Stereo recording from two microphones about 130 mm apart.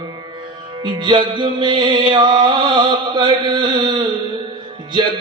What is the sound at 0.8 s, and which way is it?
Music, 35° right (ahead or behind).